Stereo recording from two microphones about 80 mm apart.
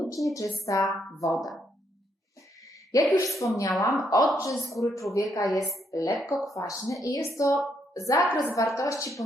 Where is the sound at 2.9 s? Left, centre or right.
Left.